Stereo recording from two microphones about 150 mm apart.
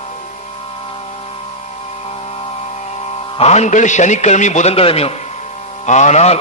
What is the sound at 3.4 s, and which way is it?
A man's voice, 50° left (ahead or behind).